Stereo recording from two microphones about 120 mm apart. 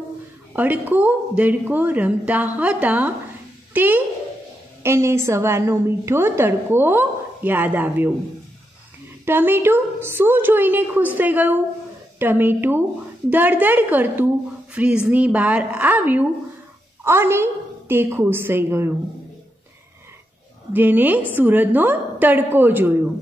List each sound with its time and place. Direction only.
0.5 s a woman's voice: 15° right (ahead or behind)
9.2 s a woman's voice: 15° right (ahead or behind)
20.7 s a woman's voice: 15° right (ahead or behind)